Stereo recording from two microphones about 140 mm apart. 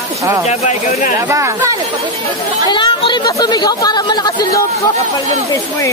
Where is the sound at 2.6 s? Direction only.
35° left (ahead or behind).